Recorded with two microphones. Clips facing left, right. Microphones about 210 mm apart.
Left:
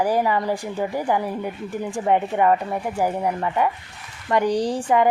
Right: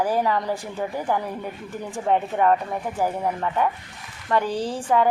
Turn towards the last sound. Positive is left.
turn(degrees=15)  # may be behind; listen again after turning